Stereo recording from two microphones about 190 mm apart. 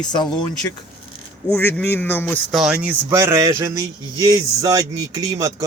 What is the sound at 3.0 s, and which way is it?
Speech, 15° right (ahead or behind).